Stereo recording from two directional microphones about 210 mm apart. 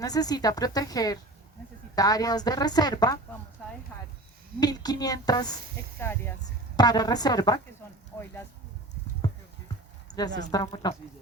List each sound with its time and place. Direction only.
0.0 s a woman's voice: 20° left (ahead or behind)
4.6 s a woman's voice: 20° left (ahead or behind)
10.1 s a sound: 20° left (ahead or behind)
10.5 s a woman's voice: 20° left (ahead or behind)